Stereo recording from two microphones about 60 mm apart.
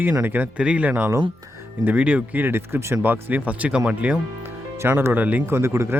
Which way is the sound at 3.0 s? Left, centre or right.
Right.